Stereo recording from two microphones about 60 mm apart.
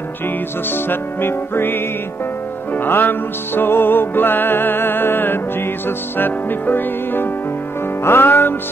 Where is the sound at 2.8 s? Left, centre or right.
Left.